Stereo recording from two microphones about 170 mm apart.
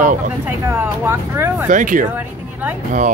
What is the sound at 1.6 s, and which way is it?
Speech, 50° right (ahead or behind).